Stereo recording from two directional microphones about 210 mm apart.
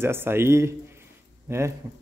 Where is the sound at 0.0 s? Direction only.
10° right (ahead or behind).